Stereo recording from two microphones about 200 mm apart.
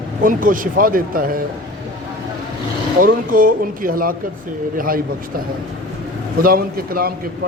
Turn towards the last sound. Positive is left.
turn(degrees=-45)  # may be behind; listen again after turning